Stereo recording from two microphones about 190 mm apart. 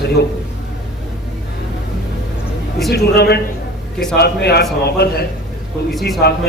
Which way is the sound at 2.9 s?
60° left (ahead or behind).